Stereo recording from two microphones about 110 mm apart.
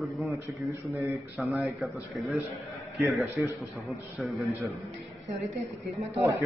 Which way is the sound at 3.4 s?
25° right (ahead or behind).